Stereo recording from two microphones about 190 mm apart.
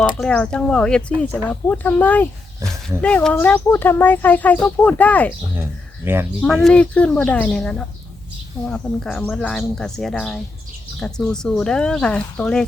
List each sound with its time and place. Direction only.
0.0 s speech: 5° left (ahead or behind)
2.6 s speech: 15° right (ahead or behind)
3.0 s speech: 5° left (ahead or behind)
6.1 s speech: 10° right (ahead or behind)
6.4 s speech: centre (ahead or behind)